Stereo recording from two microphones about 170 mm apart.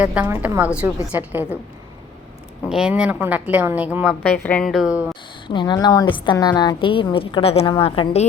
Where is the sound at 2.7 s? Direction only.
5° right (ahead or behind).